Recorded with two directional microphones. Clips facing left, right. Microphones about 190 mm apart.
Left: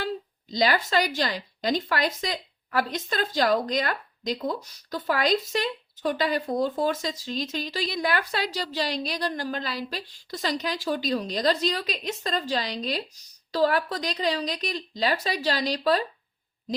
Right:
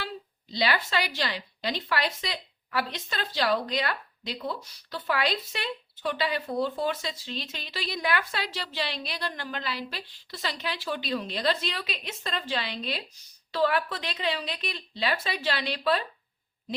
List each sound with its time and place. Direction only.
0.5 s a woman's voice: 45° left (ahead or behind)